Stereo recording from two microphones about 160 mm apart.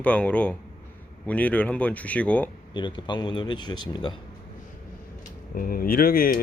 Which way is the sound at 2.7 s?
30° left (ahead or behind).